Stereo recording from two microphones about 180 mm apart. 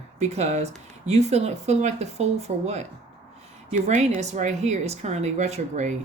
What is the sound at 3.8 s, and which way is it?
Speech, 40° right (ahead or behind).